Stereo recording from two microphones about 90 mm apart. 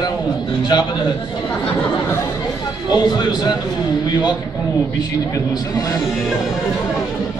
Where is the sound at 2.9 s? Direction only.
55° left (ahead or behind).